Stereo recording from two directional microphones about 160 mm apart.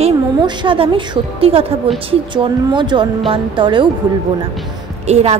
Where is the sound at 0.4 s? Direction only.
30° right (ahead or behind).